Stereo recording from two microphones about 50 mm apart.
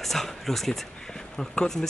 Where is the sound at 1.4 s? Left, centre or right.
Centre.